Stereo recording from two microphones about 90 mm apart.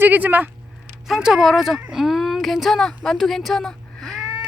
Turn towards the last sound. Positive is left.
turn(degrees=5)  # may be behind; listen again after turning